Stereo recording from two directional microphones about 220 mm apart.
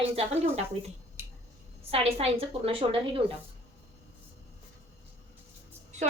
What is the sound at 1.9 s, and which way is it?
A woman's voice, 25° right (ahead or behind).